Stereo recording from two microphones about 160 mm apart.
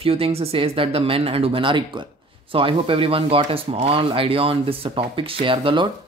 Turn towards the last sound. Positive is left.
turn(degrees=-30)  # may be behind; listen again after turning